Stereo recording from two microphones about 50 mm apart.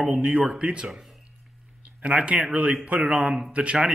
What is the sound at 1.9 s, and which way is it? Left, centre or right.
Speech, right.